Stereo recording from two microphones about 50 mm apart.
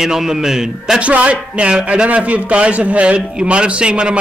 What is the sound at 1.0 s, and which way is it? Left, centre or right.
A man's voice, right.